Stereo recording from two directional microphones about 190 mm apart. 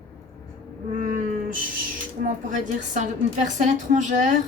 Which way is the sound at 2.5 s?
40° right (ahead or behind).